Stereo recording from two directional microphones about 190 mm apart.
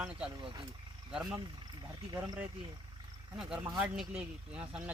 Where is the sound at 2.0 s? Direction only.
20° right (ahead or behind).